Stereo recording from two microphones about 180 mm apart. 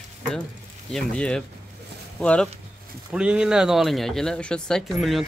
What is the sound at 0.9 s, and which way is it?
Speech, 5° left (ahead or behind).